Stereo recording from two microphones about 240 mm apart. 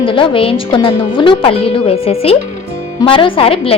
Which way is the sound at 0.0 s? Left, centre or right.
Left.